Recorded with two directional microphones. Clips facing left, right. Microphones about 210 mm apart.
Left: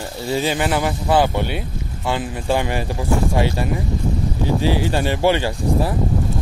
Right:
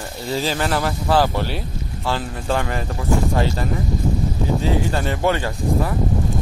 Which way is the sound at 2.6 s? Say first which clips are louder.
Left 2 dB; 20° left (ahead or behind).